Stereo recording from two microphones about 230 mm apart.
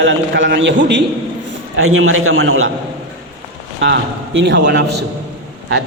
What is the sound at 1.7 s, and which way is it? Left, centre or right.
A man's voice, right.